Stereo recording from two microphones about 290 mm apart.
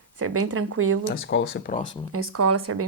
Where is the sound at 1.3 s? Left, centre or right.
Left.